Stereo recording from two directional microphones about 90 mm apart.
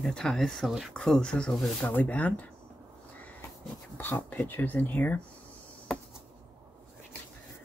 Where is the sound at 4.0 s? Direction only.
20° left (ahead or behind).